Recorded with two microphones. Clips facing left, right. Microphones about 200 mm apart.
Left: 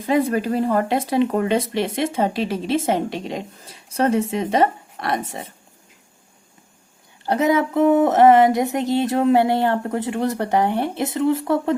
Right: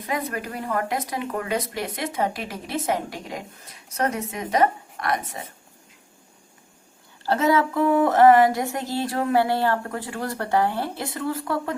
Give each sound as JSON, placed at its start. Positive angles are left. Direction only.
{"t": 0.0, "sound": "speech", "side_deg": 30}
{"t": 7.3, "sound": "speech", "side_deg": 20}